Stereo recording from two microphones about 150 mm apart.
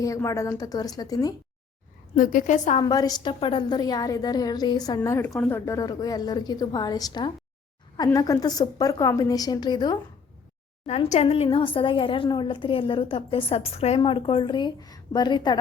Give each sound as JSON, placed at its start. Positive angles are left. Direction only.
{"t": 0.0, "sound": "a woman's voice", "side_deg": 20}
{"t": 2.1, "sound": "a woman's voice", "side_deg": 60}
{"t": 2.8, "sound": "a woman's voice", "side_deg": 25}
{"t": 10.8, "sound": "a woman's voice", "side_deg": 45}